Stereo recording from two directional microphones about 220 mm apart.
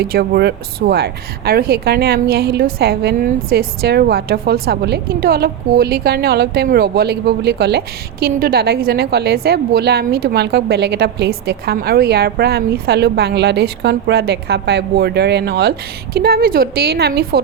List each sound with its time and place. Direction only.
0.0 s speech: 45° right (ahead or behind)